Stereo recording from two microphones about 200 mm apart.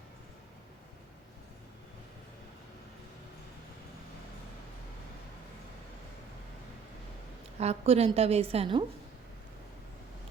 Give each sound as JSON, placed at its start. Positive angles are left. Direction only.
{"t": 7.6, "sound": "a woman's voice", "side_deg": -30}